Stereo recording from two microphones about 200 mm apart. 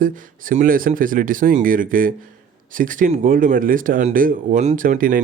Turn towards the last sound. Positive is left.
turn(degrees=-45)  # may be behind; listen again after turning